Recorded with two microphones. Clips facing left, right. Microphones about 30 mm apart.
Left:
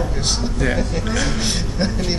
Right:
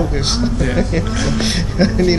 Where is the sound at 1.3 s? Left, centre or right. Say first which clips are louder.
Right 5 dB; right.